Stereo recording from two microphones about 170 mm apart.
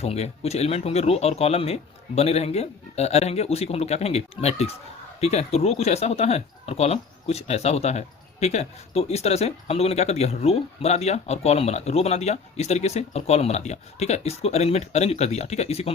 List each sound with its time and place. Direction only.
0.0 s speech: 40° left (ahead or behind)